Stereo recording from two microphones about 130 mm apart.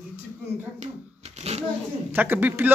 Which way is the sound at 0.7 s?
55° right (ahead or behind).